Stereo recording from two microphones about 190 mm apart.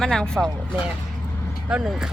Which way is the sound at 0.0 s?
5° left (ahead or behind).